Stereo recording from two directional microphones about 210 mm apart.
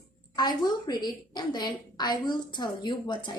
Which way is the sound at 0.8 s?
20° left (ahead or behind).